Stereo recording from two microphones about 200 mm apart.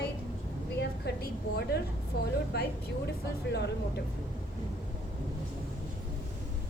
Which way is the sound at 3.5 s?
60° left (ahead or behind).